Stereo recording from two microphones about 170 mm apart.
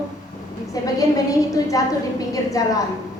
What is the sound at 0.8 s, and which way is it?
A woman's voice, 20° left (ahead or behind).